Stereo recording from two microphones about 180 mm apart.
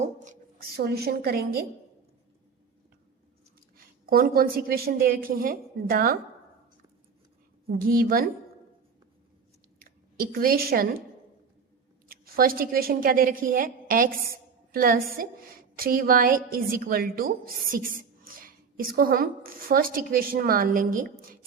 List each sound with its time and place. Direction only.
0.8 s a woman's voice: 60° right (ahead or behind)
3.8 s a woman's voice: 55° right (ahead or behind)
7.7 s a woman's voice: 55° right (ahead or behind)
9.7 s speech: 55° right (ahead or behind)
12.0 s a woman's voice: 55° right (ahead or behind)